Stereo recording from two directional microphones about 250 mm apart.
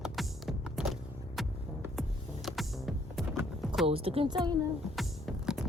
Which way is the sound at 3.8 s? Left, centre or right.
Right.